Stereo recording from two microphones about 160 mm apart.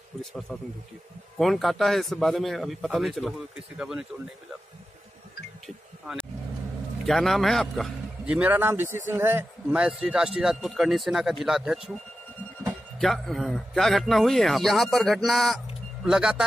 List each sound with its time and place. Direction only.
0.2 s a man's voice: centre (ahead or behind)
7.1 s a man's voice: centre (ahead or behind)
13.0 s a man's voice: centre (ahead or behind)